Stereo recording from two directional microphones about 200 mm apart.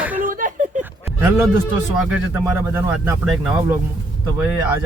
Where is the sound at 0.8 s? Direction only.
10° right (ahead or behind).